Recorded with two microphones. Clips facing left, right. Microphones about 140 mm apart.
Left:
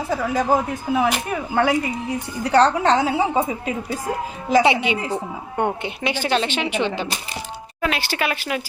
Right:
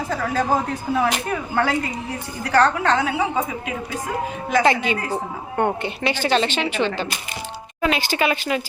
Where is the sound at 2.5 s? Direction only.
25° left (ahead or behind).